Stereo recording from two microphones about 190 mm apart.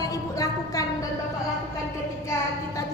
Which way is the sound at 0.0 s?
15° left (ahead or behind).